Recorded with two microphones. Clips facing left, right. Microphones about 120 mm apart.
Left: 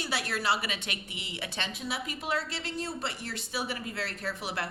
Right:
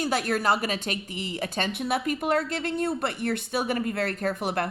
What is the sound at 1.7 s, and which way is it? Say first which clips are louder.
A woman's voice: right 9 dB; 60° right (ahead or behind).